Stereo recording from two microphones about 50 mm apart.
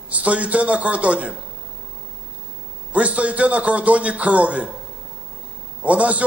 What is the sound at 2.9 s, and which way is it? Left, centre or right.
A man's voice, right.